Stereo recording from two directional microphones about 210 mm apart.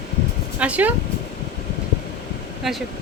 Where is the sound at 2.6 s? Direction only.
Centre (ahead or behind).